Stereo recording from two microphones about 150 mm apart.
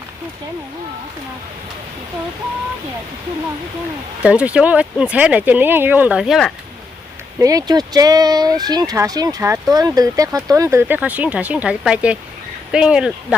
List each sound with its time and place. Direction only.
4.2 s speech: 5° right (ahead or behind)
7.3 s speech: 25° right (ahead or behind); by 13.1 s 5° right (ahead or behind)